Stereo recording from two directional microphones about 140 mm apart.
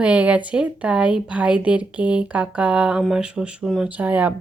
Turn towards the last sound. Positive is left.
turn(degrees=-10)  # may be behind; listen again after turning